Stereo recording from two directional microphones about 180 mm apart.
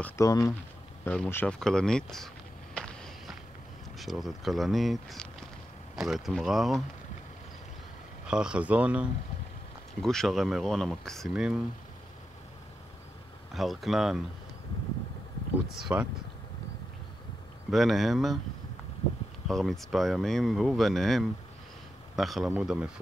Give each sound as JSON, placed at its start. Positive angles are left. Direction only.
{"t": 0.0, "sound": "speech", "side_deg": 20}
{"t": 1.0, "sound": "speech", "side_deg": 5}
{"t": 8.3, "sound": "speech", "side_deg": -5}
{"t": 10.0, "sound": "speech", "side_deg": 0}
{"t": 13.5, "sound": "speech", "side_deg": 0}
{"t": 15.7, "sound": "speech", "side_deg": -5}
{"t": 17.6, "sound": "speech", "side_deg": 0}
{"t": 19.4, "sound": "a man's voice", "side_deg": 0}